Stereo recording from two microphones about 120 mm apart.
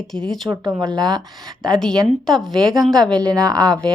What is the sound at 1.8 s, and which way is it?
Speech, 5° left (ahead or behind).